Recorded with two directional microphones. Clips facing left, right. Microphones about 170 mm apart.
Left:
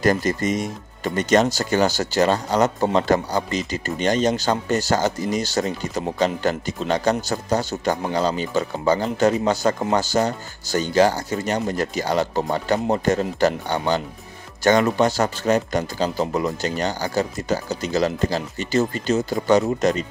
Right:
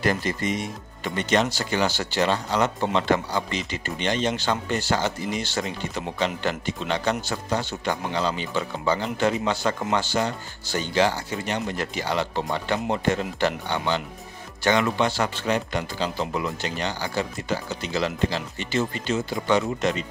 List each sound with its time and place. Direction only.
0.0 s speech: 40° left (ahead or behind)